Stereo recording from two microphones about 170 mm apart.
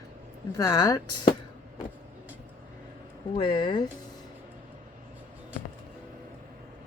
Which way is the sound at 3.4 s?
25° left (ahead or behind).